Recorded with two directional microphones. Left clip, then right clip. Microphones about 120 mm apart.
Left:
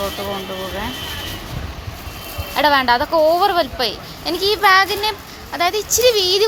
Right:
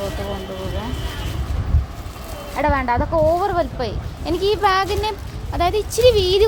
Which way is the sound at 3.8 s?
30° right (ahead or behind).